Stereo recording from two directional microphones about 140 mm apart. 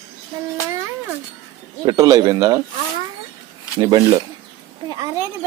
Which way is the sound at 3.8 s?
30° right (ahead or behind).